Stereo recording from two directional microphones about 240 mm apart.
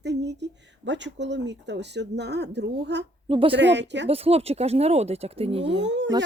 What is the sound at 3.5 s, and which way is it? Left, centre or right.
Speech, right.